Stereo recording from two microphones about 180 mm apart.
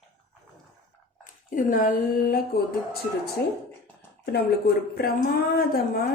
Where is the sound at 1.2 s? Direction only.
50° left (ahead or behind).